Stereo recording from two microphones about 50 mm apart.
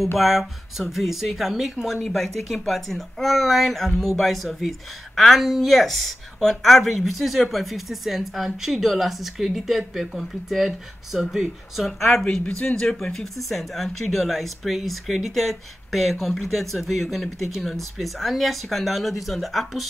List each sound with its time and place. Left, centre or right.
0.2 s speech: centre